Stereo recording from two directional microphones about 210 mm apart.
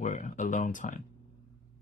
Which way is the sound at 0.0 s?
35° left (ahead or behind).